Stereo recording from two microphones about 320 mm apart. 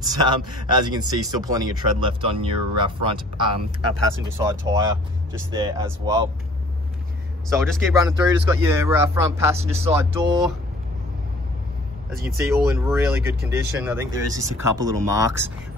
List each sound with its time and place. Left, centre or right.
0.0 s speech: centre
7.5 s speech: centre
8.2 s speech: centre
12.1 s speech: centre